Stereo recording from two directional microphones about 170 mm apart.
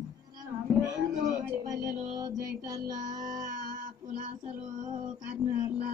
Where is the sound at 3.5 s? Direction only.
50° right (ahead or behind).